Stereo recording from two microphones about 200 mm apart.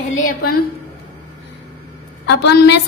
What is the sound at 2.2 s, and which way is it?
Speech, 60° left (ahead or behind).